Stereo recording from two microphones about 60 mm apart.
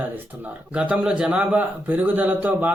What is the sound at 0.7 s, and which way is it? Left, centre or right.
A man's voice, centre.